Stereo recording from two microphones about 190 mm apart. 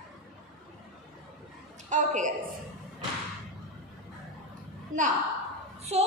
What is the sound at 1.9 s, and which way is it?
Speech, 40° right (ahead or behind).